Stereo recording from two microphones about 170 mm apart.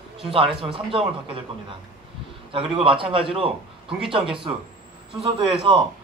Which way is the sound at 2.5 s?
30° right (ahead or behind).